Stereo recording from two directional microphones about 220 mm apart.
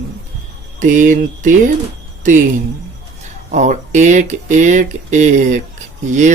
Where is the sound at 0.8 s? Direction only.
35° right (ahead or behind).